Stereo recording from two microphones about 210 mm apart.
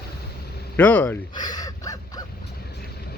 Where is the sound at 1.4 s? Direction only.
20° left (ahead or behind).